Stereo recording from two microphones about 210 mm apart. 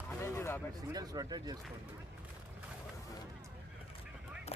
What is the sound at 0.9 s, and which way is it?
Speech, 20° right (ahead or behind).